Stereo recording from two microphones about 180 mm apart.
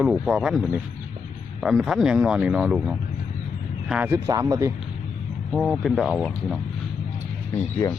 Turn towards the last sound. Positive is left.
turn(degrees=15)  # may be behind; listen again after turning